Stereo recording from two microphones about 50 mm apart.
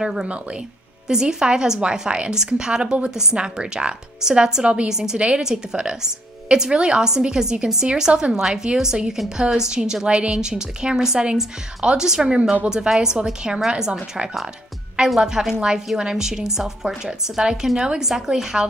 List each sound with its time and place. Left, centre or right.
0.0 s a woman's voice: centre
15.0 s a woman's voice: centre